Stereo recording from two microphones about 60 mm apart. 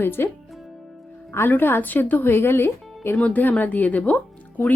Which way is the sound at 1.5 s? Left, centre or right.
Left.